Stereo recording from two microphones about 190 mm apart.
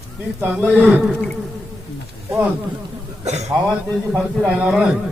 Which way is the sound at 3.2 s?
35° right (ahead or behind).